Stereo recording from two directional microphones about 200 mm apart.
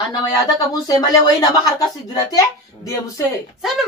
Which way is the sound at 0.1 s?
20° left (ahead or behind).